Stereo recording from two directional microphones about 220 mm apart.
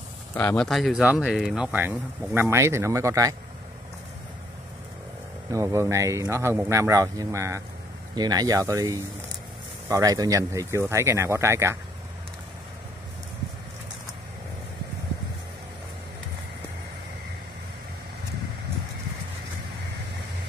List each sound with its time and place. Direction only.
0.3 s speech: 10° left (ahead or behind); by 3.3 s 15° right (ahead or behind)
5.5 s speech: 15° right (ahead or behind)